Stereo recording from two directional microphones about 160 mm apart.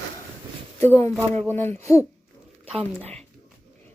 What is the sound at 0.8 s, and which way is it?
A woman's voice, 15° left (ahead or behind).